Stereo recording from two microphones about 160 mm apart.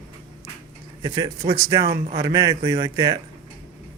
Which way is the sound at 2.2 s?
20° right (ahead or behind).